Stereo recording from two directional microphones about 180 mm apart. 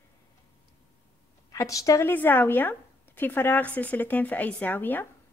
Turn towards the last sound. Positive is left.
turn(degrees=10)  # may be behind; listen again after turning